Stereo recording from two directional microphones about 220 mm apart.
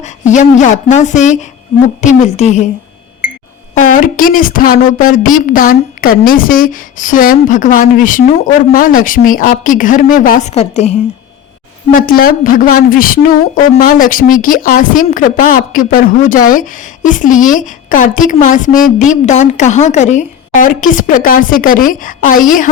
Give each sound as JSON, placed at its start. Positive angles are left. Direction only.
{"t": 0.3, "sound": "speech", "side_deg": 35}
{"t": 3.9, "sound": "speech", "side_deg": 40}
{"t": 11.9, "sound": "speech", "side_deg": 40}